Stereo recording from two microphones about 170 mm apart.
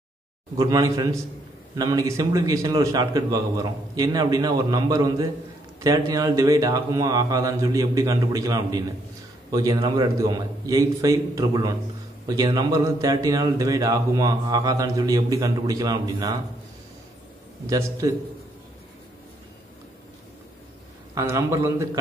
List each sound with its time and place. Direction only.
0.6 s speech: 20° right (ahead or behind)
17.6 s speech: 20° right (ahead or behind)
21.1 s a man's voice: 20° right (ahead or behind)